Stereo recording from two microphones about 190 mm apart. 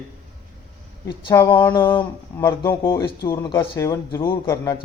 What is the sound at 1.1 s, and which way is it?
Speech, 20° left (ahead or behind).